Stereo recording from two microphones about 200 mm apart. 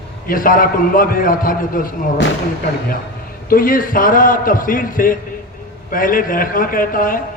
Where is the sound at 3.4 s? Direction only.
45° left (ahead or behind).